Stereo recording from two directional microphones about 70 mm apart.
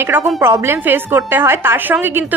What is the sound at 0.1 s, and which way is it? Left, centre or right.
A woman's voice, right.